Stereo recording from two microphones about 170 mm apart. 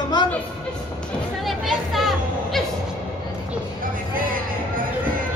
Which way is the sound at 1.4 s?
Centre (ahead or behind).